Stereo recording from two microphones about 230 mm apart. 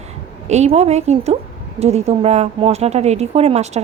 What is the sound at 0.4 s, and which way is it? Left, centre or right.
Speech, right.